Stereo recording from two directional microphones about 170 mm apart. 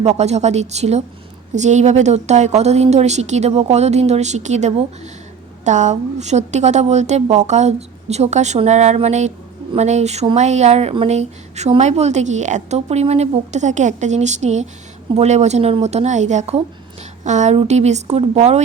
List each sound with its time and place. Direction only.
0.0 s a woman's voice: 40° right (ahead or behind)